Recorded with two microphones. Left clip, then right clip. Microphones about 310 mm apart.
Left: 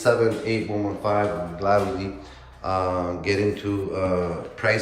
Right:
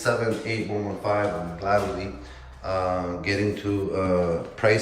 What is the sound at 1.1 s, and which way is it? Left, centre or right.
A man's voice, centre.